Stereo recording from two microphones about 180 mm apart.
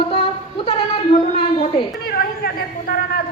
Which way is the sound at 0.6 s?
35° left (ahead or behind).